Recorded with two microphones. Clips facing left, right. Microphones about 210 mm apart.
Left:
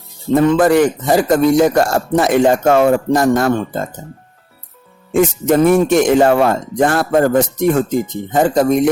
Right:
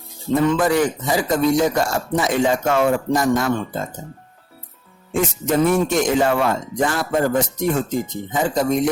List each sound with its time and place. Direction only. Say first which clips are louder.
0.6 s speech: left 6 dB; 60° left (ahead or behind)
5.2 s speech: left 6 dB; 55° left (ahead or behind)